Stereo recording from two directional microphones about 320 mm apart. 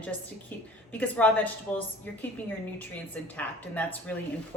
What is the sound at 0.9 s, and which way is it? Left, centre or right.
Speech, centre.